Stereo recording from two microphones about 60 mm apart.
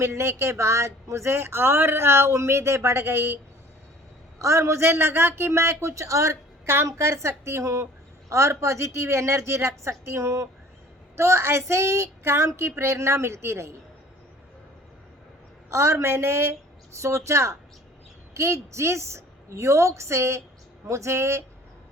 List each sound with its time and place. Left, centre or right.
0.0 s speech: right
4.4 s speech: right
15.7 s speech: right